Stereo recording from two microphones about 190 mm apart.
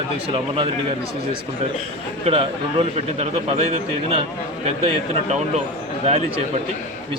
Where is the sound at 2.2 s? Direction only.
30° right (ahead or behind).